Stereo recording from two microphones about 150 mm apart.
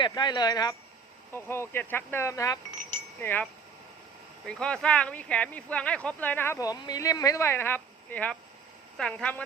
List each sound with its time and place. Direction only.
0.1 s speech: 30° left (ahead or behind)
1.3 s speech: 15° left (ahead or behind)